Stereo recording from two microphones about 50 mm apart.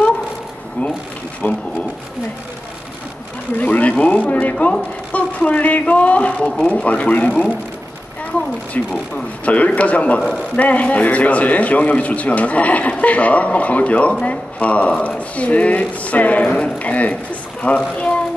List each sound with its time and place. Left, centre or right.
1.4 s speech: left
3.5 s speech: left
8.8 s speech: left